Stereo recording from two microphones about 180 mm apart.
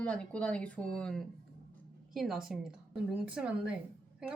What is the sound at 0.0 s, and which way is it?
Speech, 5° left (ahead or behind).